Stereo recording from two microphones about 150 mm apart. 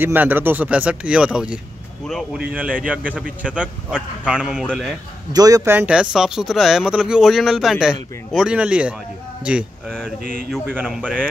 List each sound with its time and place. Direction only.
0.0 s a man's voice: 10° right (ahead or behind)
2.5 s speech: 10° right (ahead or behind)
5.3 s a man's voice: 25° right (ahead or behind)
5.8 s a man's voice: 5° right (ahead or behind)
9.8 s a man's voice: 5° left (ahead or behind)